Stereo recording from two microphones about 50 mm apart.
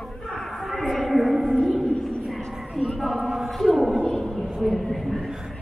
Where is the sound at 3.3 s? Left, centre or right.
Centre.